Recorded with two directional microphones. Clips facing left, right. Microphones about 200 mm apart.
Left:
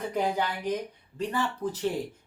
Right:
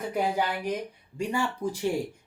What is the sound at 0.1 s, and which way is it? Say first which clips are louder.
Speech: right 2 dB; 10° right (ahead or behind).